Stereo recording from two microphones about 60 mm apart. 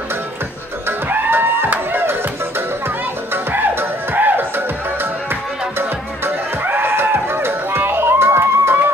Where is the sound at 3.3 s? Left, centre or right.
Right.